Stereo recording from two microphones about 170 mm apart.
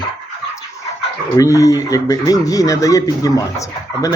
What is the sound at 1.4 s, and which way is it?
Speech, 20° left (ahead or behind).